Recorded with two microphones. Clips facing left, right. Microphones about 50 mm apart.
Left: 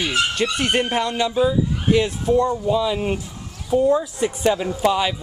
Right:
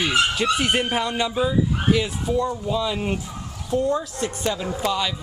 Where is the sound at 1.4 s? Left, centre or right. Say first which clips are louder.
Left 2 dB; centre.